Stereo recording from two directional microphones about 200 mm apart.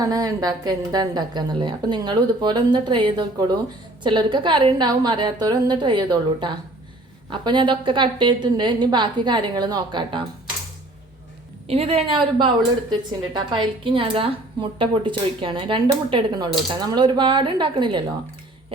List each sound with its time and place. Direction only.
0.0 s a woman's voice: 20° right (ahead or behind)
11.7 s a woman's voice: 30° right (ahead or behind)